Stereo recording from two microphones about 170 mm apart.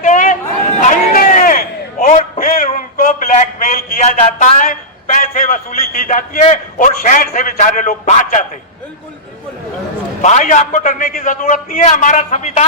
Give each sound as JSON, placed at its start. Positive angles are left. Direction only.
{"t": 0.0, "sound": "a sound", "side_deg": 50}
{"t": 6.0, "sound": "a man's voice", "side_deg": 50}
{"t": 10.2, "sound": "a man's voice", "side_deg": 45}